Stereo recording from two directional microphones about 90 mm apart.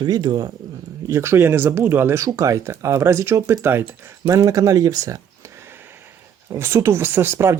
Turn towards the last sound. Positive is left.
turn(degrees=-30)  # may be behind; listen again after turning